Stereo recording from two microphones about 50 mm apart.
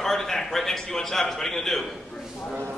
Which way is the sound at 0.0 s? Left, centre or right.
Centre.